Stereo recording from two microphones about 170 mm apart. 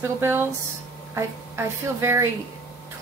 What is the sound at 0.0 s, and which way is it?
Speech, 15° right (ahead or behind).